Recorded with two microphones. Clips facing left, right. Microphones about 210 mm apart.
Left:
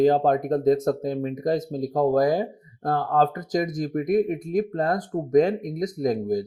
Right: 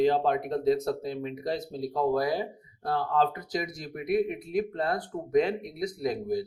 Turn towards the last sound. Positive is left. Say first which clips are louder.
# left 5 dB
turn(degrees=45)  # may be behind; listen again after turning